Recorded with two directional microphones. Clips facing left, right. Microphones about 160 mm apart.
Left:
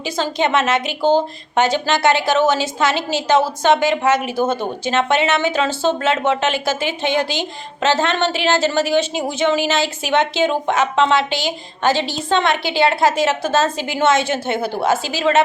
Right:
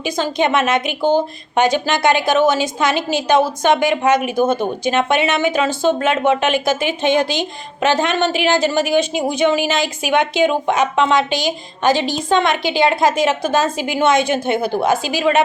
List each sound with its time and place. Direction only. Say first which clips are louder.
0.0 s a woman's voice: right 2 dB; 15° right (ahead or behind)